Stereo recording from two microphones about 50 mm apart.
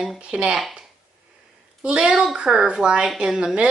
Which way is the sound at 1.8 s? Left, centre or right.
Centre.